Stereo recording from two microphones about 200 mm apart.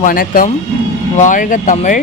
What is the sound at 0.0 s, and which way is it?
Speech, 45° left (ahead or behind).